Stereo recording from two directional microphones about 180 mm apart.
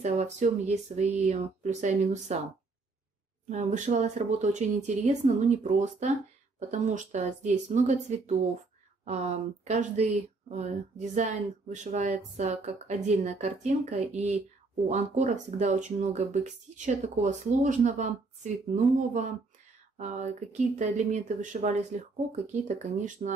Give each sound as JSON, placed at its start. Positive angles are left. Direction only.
{"t": 0.0, "sound": "speech", "side_deg": -40}
{"t": 3.4, "sound": "speech", "side_deg": -45}
{"t": 20.0, "sound": "speech", "side_deg": -40}